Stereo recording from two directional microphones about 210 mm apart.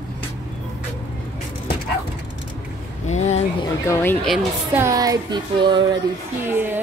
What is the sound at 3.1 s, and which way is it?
Speech, 30° left (ahead or behind).